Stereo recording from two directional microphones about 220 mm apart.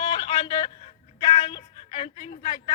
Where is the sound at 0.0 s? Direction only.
25° left (ahead or behind).